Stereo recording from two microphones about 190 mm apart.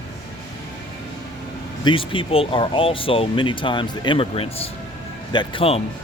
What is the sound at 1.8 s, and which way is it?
Speech, 25° left (ahead or behind).